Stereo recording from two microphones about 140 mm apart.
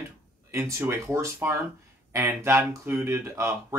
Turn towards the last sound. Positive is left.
turn(degrees=-20)  # may be behind; listen again after turning